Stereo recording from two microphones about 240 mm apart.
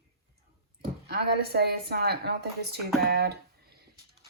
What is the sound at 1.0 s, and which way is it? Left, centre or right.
A woman's voice, right.